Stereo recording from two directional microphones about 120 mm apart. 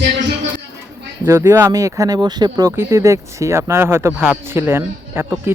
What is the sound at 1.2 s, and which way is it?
Speech, 25° right (ahead or behind).